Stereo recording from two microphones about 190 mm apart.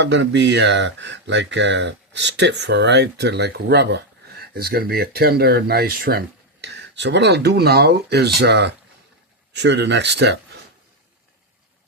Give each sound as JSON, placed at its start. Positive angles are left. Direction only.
{"t": 0.0, "sound": "speech", "side_deg": -65}
{"t": 4.5, "sound": "speech", "side_deg": -55}